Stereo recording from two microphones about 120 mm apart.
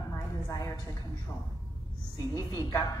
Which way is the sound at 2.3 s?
35° left (ahead or behind).